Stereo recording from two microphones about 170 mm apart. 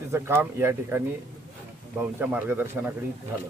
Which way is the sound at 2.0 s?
10° right (ahead or behind).